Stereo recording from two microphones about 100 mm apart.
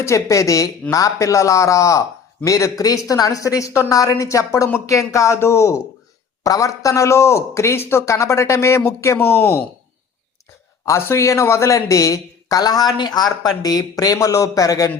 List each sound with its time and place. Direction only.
0.0 s speech: 30° left (ahead or behind)
10.8 s speech: 30° left (ahead or behind)